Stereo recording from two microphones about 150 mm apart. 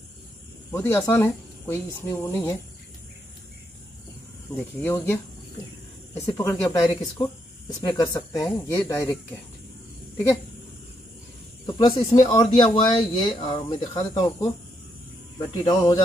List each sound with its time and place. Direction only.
0.7 s speech: 15° left (ahead or behind)
4.7 s speech: 15° left (ahead or behind)
11.6 s speech: 30° left (ahead or behind)
15.5 s speech: 35° left (ahead or behind)